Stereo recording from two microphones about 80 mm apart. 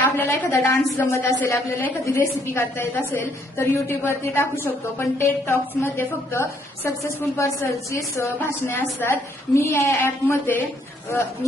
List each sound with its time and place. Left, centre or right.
0.0 s a woman's voice: left
7.0 s a woman's voice: left